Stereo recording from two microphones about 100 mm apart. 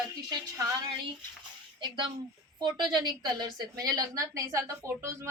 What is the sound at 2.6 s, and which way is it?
A woman's voice, 50° right (ahead or behind).